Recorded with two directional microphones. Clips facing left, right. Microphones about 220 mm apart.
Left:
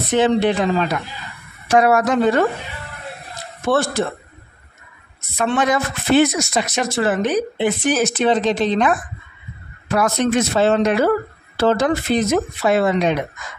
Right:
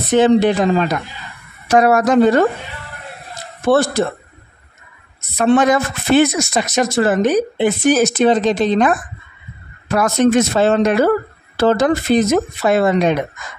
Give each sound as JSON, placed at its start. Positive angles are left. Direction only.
{"t": 0.1, "sound": "a woman's voice", "side_deg": -45}
{"t": 3.6, "sound": "a woman's voice", "side_deg": -35}
{"t": 5.4, "sound": "speech", "side_deg": -40}
{"t": 9.9, "sound": "speech", "side_deg": -45}